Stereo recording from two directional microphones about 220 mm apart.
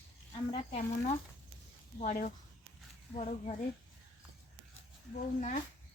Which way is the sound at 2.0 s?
35° left (ahead or behind).